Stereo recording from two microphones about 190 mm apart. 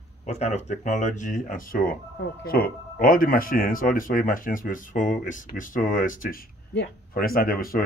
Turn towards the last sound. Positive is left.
turn(degrees=50)  # may be behind; listen again after turning